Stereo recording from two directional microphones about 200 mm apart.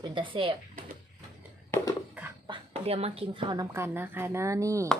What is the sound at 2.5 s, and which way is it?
A woman's voice, 30° right (ahead or behind).